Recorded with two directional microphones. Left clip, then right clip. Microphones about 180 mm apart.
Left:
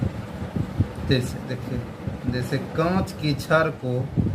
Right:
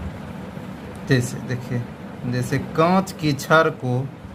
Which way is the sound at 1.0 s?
60° right (ahead or behind).